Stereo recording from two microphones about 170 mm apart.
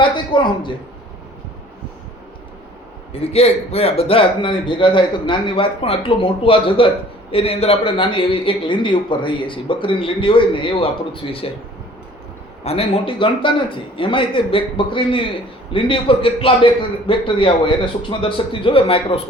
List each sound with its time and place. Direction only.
0.0 s speech: 30° left (ahead or behind)
3.1 s a man's voice: 35° left (ahead or behind)
12.6 s a man's voice: 35° left (ahead or behind)